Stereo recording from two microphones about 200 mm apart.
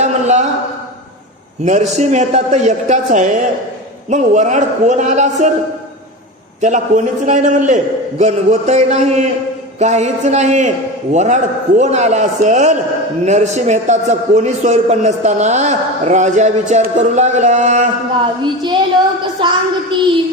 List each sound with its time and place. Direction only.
0.0 s a sound: 35° right (ahead or behind)
1.6 s a man's voice: 35° right (ahead or behind)
6.6 s a man's voice: 40° right (ahead or behind)
18.4 s a woman's voice: 20° right (ahead or behind)